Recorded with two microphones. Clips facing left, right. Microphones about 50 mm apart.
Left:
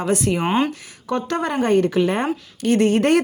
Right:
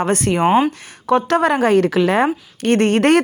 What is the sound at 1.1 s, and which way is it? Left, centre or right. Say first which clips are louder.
Speech: right 7 dB; right.